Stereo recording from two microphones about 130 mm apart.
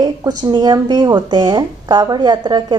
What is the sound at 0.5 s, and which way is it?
A woman's voice, 35° right (ahead or behind).